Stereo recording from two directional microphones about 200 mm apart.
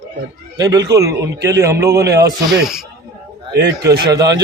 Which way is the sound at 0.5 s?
20° right (ahead or behind).